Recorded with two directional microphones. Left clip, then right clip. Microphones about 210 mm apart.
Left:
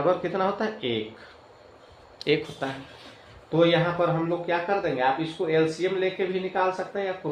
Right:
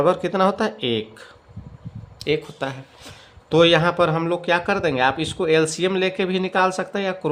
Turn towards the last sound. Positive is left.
turn(degrees=-45)  # may be behind; listen again after turning